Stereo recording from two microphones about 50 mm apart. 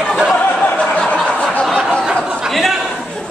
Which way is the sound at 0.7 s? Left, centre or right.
Left.